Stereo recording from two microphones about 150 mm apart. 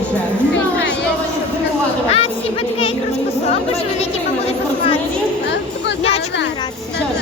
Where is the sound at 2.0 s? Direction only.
40° left (ahead or behind).